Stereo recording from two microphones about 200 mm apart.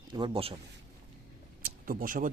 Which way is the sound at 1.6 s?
45° right (ahead or behind).